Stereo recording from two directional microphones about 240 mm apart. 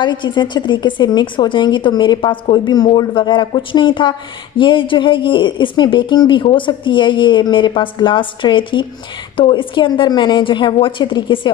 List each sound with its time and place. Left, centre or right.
0.0 s speech: centre